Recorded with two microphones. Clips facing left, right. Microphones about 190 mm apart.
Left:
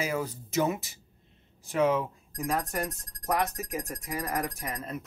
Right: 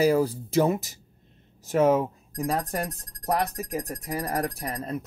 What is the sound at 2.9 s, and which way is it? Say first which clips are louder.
Speech: right 3 dB; centre (ahead or behind).